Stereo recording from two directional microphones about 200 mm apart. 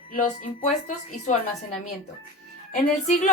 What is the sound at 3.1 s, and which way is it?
Speech, 35° left (ahead or behind).